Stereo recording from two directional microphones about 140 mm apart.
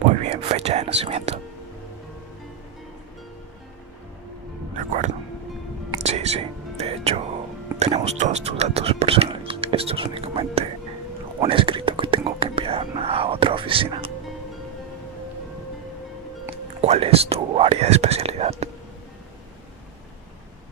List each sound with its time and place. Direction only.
0.2 s speech: 45° right (ahead or behind)
4.9 s speech: 55° right (ahead or behind)
6.0 s whispering: 50° right (ahead or behind)
7.8 s speech: 50° right (ahead or behind)
11.4 s whispering: 40° right (ahead or behind)
16.8 s speech: 50° right (ahead or behind)